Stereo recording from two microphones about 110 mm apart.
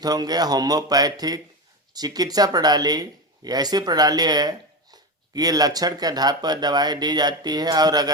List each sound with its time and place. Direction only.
0.0 s speech: 35° right (ahead or behind)